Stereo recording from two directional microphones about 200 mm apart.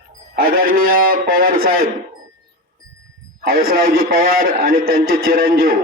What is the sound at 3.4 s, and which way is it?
A man's voice, 50° right (ahead or behind).